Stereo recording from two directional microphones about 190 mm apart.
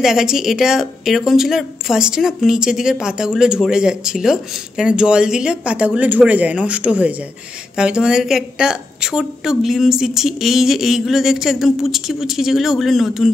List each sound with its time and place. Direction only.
0.0 s a woman's voice: centre (ahead or behind)